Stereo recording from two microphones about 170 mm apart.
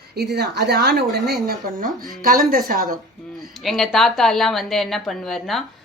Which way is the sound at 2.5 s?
60° right (ahead or behind).